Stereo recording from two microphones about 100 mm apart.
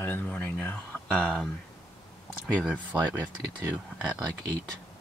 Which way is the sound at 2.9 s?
20° right (ahead or behind).